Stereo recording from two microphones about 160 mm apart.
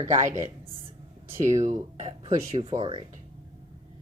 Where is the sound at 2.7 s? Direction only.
30° right (ahead or behind).